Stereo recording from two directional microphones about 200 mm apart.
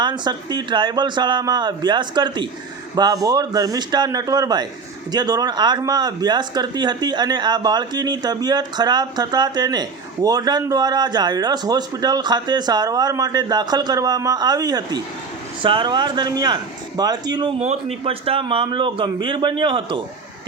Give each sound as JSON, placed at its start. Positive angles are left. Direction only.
{"t": 0.0, "sound": "speech", "side_deg": -20}